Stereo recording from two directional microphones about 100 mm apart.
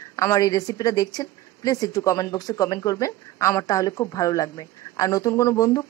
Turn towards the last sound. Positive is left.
turn(degrees=35)  # may be behind; listen again after turning